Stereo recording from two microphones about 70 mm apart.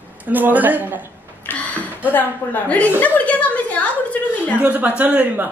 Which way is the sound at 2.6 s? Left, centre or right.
Centre.